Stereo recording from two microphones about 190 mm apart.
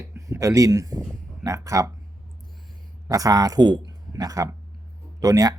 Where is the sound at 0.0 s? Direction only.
15° right (ahead or behind).